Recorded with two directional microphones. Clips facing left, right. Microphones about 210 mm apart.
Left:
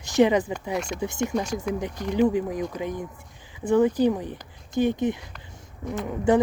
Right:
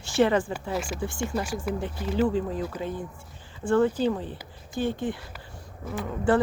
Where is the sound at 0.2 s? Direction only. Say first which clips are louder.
Left 3 dB; 20° left (ahead or behind).